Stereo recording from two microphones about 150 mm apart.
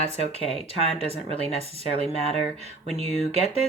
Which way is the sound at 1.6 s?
45° right (ahead or behind).